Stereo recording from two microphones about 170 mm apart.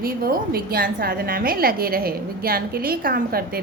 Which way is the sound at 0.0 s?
60° right (ahead or behind).